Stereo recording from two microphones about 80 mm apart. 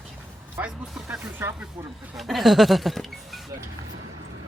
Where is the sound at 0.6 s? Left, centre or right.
Right.